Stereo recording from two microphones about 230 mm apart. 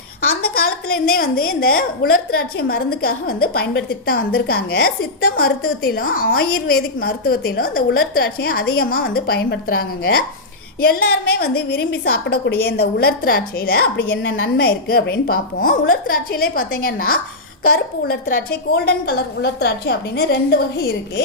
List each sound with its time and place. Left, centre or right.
0.3 s a woman's voice: left